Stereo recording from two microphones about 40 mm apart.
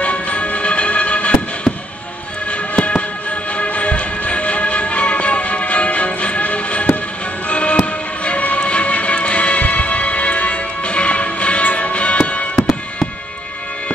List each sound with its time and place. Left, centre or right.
0.0 s music: left